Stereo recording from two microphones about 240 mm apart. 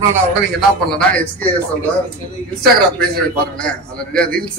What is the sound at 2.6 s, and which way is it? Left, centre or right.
A man's voice, centre.